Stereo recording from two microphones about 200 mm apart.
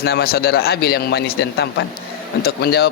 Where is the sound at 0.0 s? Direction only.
50° left (ahead or behind).